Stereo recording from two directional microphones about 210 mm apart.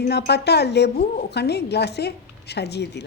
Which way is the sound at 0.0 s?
50° left (ahead or behind).